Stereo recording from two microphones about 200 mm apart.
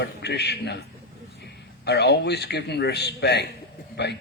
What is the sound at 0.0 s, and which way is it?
A man's voice, 55° left (ahead or behind).